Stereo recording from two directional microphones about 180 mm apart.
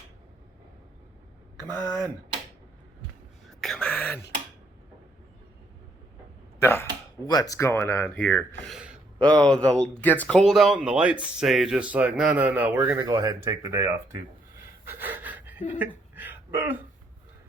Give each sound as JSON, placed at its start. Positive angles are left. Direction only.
{"t": 1.5, "sound": "speech", "side_deg": 15}
{"t": 3.6, "sound": "whispering", "side_deg": 5}
{"t": 6.6, "sound": "speech", "side_deg": 15}
{"t": 8.6, "sound": "speech", "side_deg": 0}
{"t": 13.0, "sound": "speech", "side_deg": -20}
{"t": 14.8, "sound": "a sound", "side_deg": -10}